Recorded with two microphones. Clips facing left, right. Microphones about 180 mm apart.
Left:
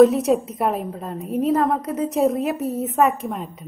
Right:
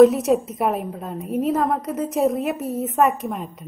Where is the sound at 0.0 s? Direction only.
Centre (ahead or behind).